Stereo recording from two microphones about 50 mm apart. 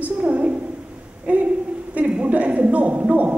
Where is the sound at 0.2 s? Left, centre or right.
Right.